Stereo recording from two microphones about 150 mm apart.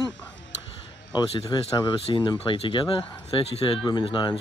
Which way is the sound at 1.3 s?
40° left (ahead or behind).